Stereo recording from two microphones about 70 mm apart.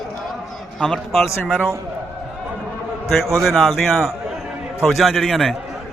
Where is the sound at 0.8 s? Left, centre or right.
Centre.